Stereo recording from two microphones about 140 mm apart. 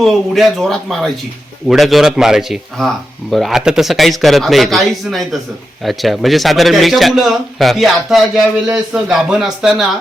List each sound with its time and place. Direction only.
0.0 s speech: centre (ahead or behind)